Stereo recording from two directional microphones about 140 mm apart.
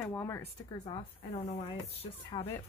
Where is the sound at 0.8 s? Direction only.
40° left (ahead or behind).